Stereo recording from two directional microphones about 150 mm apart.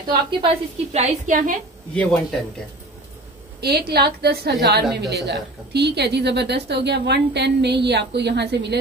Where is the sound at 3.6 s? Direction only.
90° right.